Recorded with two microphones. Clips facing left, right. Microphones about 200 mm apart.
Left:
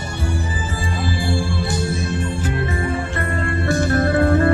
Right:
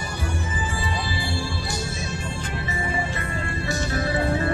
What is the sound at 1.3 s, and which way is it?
Music, 55° left (ahead or behind).